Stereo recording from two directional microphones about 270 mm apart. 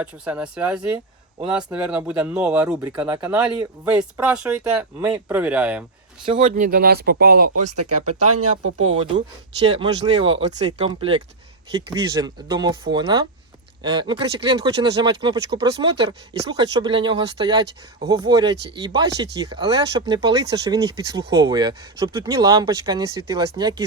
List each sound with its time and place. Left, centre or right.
0.0 s speech: centre
6.2 s speech: centre
6.5 s speech: right
7.8 s speech: right
9.7 s speech: centre